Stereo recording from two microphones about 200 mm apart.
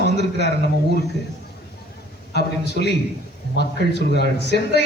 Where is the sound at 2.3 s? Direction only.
55° left (ahead or behind).